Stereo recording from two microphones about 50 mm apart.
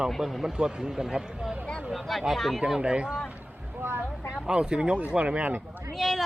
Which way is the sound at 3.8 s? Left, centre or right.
Right.